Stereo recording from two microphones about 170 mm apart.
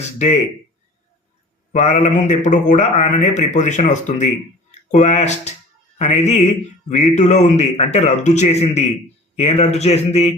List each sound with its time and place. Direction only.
0.0 s speech: 40° left (ahead or behind)
1.7 s a man's voice: 45° left (ahead or behind)